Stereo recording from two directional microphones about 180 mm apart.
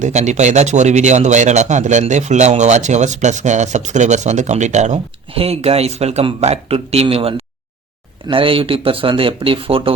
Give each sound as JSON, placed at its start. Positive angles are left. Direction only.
{"t": 0.0, "sound": "speech", "side_deg": -40}